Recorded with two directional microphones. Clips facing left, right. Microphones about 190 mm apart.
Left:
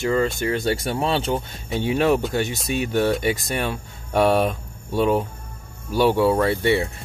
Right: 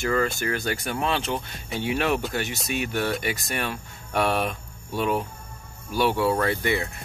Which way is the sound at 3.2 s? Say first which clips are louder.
Left 5 dB; 25° left (ahead or behind).